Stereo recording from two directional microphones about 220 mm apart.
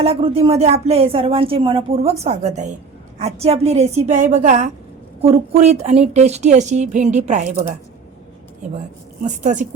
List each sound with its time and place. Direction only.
0.0 s a woman's voice: 25° right (ahead or behind)
9.2 s a woman's voice: 35° right (ahead or behind)